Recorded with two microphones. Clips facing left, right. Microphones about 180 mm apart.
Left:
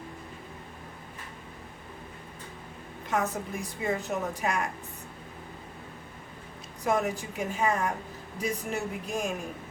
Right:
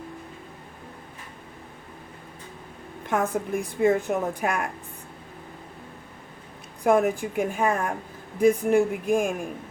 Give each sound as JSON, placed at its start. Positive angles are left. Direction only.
{"t": 3.1, "sound": "a woman's voice", "side_deg": -55}
{"t": 6.8, "sound": "a woman's voice", "side_deg": -55}